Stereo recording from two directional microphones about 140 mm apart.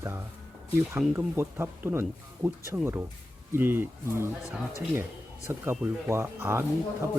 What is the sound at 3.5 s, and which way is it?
Speech, 15° right (ahead or behind).